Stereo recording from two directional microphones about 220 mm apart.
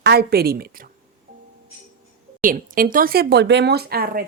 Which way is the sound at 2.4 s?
40° right (ahead or behind).